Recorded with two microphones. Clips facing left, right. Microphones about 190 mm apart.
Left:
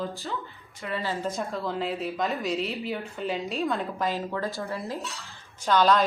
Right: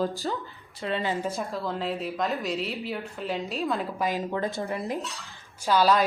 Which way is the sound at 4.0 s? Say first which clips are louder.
Right 1 dB; 15° right (ahead or behind).